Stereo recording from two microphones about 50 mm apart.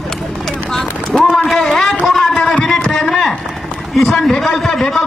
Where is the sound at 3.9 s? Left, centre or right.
Centre.